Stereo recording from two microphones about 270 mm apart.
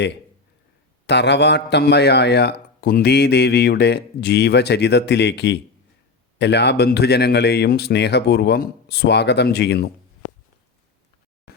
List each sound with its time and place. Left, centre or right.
1.0 s a man's voice: left